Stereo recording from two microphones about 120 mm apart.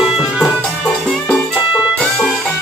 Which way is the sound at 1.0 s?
5° left (ahead or behind).